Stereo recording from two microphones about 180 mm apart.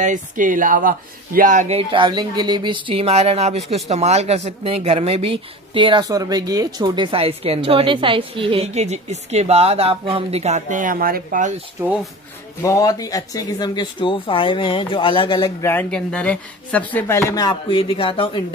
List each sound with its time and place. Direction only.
0.0 s speech: 45° right (ahead or behind)
11.8 s speech: 5° right (ahead or behind)
12.6 s speech: 20° left (ahead or behind)
15.6 s speech: 10° left (ahead or behind); by 18.4 s 30° left (ahead or behind)